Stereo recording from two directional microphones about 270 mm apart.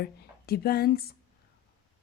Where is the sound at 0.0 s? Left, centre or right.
Left.